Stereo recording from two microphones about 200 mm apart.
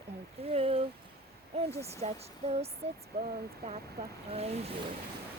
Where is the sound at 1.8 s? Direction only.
30° right (ahead or behind).